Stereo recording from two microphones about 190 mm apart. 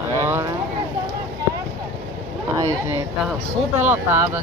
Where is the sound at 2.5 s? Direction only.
20° right (ahead or behind).